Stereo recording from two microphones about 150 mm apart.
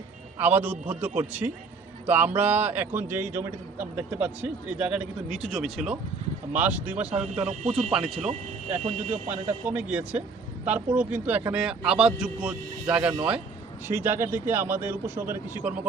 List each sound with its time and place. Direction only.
0.3 s a man's voice: 15° right (ahead or behind)
7.4 s speech: 45° right (ahead or behind)
7.9 s speech: centre (ahead or behind)
8.2 s speech: 45° right (ahead or behind)
9.6 s a man's voice: 10° right (ahead or behind)